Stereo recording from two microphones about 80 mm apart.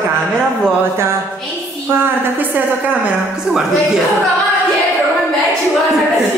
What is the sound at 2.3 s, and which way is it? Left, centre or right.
Speech, right.